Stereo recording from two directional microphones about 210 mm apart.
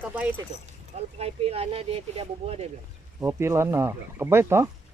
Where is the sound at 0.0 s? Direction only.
10° right (ahead or behind).